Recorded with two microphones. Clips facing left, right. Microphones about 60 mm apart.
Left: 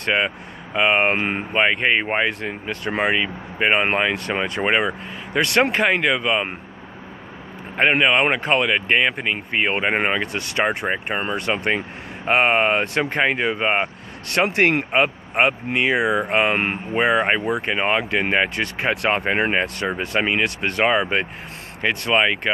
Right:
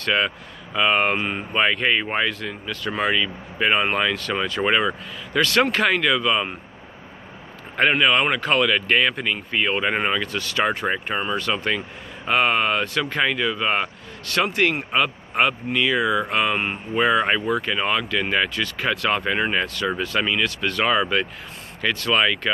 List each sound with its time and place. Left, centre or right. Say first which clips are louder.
0.0 s speech: left 1 dB; left
1.5 s speech: left 1 dB; left
7.7 s speech: left 1 dB; left
14.5 s speech: left 3 dB; left
14.9 s speech: left 3 dB; left